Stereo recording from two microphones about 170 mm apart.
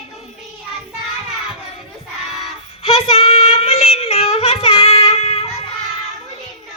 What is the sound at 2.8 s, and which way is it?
Child singing, 35° left (ahead or behind).